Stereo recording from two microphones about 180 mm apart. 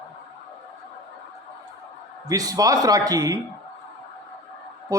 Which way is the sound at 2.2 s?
20° right (ahead or behind).